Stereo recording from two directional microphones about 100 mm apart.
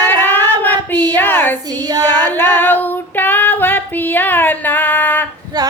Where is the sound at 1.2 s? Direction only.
20° left (ahead or behind).